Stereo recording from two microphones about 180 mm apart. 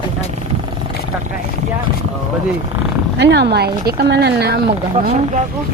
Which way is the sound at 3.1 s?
70° right (ahead or behind).